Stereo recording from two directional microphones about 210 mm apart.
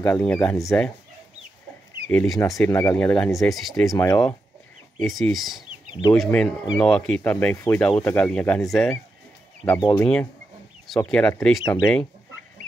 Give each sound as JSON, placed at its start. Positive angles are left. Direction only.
{"t": 0.0, "sound": "speech", "side_deg": 5}
{"t": 2.0, "sound": "speech", "side_deg": 5}
{"t": 3.9, "sound": "speech", "side_deg": 15}
{"t": 5.0, "sound": "speech", "side_deg": 0}
{"t": 11.1, "sound": "speech", "side_deg": 5}
{"t": 11.6, "sound": "speech", "side_deg": 20}